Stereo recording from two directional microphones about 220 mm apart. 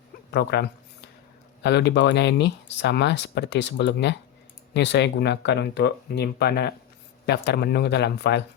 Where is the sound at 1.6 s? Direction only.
50° left (ahead or behind).